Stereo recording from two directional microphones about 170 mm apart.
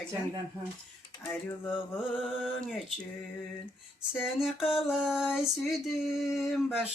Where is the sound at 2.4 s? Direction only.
Centre (ahead or behind).